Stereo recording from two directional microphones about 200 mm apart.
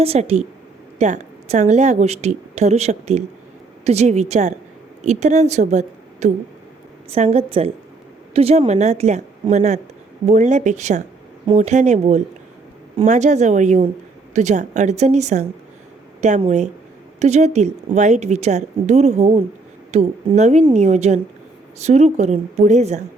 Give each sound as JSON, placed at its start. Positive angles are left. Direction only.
{"t": 0.0, "sound": "a woman's voice", "side_deg": -30}